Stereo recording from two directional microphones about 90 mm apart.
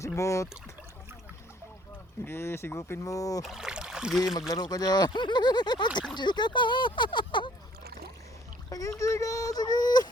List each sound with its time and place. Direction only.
0.2 s speech: 35° left (ahead or behind)
2.2 s speech: 25° left (ahead or behind)
3.4 s a sound: 5° right (ahead or behind)
4.4 s speech: 45° left (ahead or behind)
9.0 s speech: 35° left (ahead or behind)